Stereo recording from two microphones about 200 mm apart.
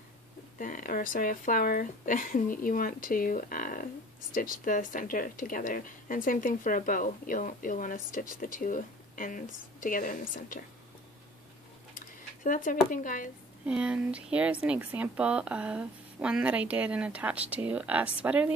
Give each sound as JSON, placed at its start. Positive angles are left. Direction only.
{"t": 0.6, "sound": "a woman's voice", "side_deg": 40}
{"t": 12.4, "sound": "speech", "side_deg": 40}
{"t": 13.7, "sound": "speech", "side_deg": -5}